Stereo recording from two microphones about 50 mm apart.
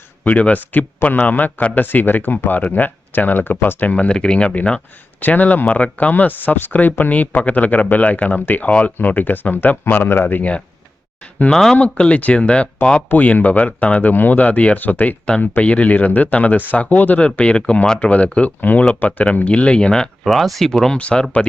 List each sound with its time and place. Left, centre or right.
0.3 s speech: left
5.2 s speech: left
11.5 s speech: centre
11.8 s speech: left
13.1 s speech: left; by 20.1 s centre
20.2 s speech: centre
20.9 s speech: centre